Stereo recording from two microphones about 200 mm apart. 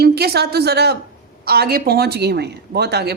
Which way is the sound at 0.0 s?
55° right (ahead or behind).